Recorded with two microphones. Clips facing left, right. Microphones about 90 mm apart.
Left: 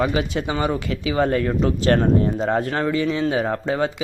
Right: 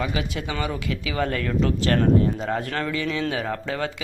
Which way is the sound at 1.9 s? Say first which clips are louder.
Left 2 dB; 35° left (ahead or behind).